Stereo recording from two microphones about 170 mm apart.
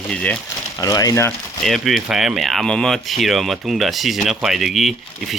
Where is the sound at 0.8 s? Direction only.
20° left (ahead or behind).